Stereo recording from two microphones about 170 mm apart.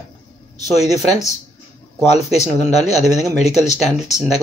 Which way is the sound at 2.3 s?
40° left (ahead or behind).